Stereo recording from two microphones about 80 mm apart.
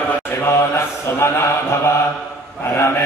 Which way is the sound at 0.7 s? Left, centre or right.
Left.